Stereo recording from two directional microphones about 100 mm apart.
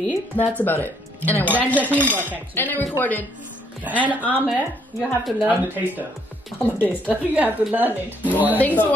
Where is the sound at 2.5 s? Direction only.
20° left (ahead or behind).